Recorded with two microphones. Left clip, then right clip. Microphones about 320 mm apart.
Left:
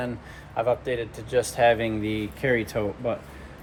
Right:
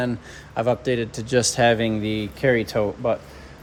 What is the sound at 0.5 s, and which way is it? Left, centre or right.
A man's voice, right.